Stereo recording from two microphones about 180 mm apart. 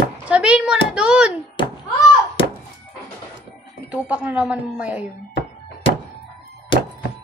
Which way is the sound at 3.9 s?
5° right (ahead or behind).